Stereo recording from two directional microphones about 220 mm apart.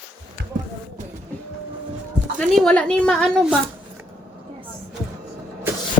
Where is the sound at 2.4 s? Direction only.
5° left (ahead or behind).